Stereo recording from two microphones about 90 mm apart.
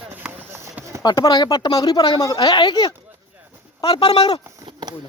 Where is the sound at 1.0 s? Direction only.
50° left (ahead or behind).